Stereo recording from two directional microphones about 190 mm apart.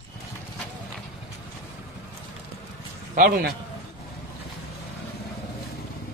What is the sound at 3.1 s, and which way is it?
Speech, 45° right (ahead or behind).